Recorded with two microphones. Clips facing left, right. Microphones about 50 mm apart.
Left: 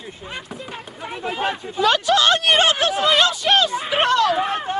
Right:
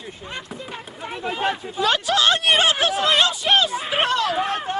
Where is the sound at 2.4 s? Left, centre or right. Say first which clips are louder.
Left 1 dB; centre.